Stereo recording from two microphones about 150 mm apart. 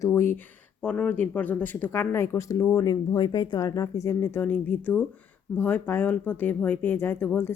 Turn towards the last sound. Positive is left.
turn(degrees=15)  # may be behind; listen again after turning